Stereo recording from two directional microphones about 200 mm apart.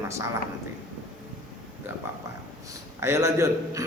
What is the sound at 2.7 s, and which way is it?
A man's voice, 15° right (ahead or behind).